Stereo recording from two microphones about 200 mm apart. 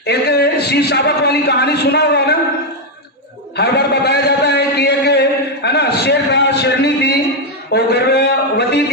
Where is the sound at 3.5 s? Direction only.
55° left (ahead or behind).